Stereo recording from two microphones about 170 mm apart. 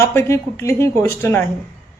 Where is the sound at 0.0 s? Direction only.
15° left (ahead or behind).